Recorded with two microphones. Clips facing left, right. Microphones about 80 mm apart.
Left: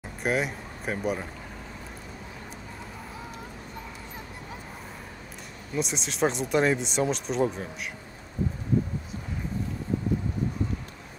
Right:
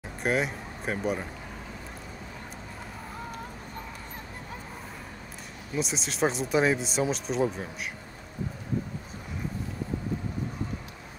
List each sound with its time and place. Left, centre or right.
0.2 s speech: centre
5.8 s speech: centre